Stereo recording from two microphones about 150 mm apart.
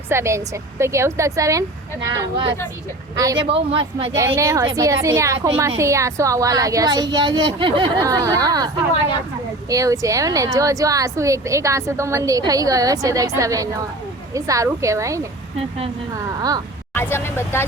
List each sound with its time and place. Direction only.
0.1 s a woman's voice: 20° right (ahead or behind)
3.4 s speech: 40° right (ahead or behind)
4.1 s a woman's voice: 20° right (ahead or behind)
8.0 s a woman's voice: 20° right (ahead or behind)
16.9 s speech: 15° left (ahead or behind)